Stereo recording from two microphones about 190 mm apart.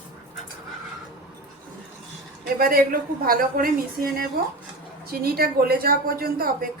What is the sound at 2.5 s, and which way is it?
A woman's voice, 50° right (ahead or behind).